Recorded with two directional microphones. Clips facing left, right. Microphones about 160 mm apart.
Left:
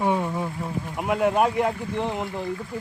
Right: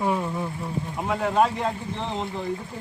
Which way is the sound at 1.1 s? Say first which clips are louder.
Left 1 dB; 10° left (ahead or behind).